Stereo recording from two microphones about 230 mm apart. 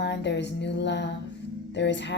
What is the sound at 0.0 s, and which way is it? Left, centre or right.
A woman's voice, left.